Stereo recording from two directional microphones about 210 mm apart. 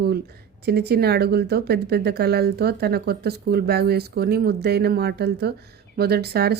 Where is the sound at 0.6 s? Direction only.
50° right (ahead or behind).